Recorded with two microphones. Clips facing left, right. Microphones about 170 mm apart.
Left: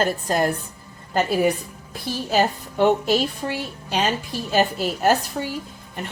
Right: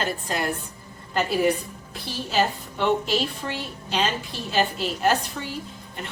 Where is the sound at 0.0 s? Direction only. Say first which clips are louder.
Left 6 dB; 40° left (ahead or behind).